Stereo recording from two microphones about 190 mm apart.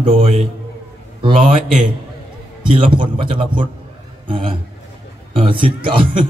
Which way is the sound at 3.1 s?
25° right (ahead or behind).